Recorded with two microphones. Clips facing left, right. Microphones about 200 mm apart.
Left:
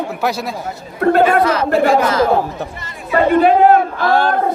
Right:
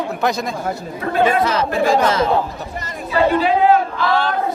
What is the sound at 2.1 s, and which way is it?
Speech, 25° right (ahead or behind).